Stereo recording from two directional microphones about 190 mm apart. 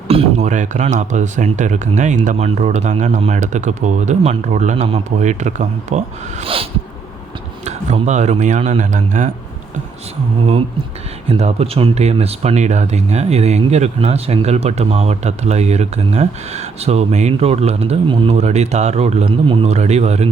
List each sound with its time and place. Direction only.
0.1 s speech: 35° right (ahead or behind)
11.3 s speech: 30° right (ahead or behind)